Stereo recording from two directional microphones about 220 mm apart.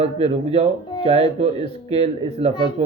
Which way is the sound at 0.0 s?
25° right (ahead or behind).